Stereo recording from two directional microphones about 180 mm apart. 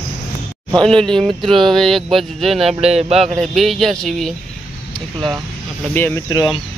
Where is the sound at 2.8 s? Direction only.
35° right (ahead or behind).